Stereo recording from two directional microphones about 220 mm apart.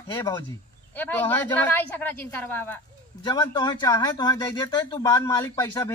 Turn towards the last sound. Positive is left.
turn(degrees=20)  # may be behind; listen again after turning